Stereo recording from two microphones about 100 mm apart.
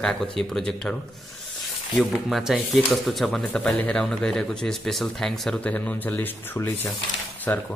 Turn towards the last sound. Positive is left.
turn(degrees=20)  # may be behind; listen again after turning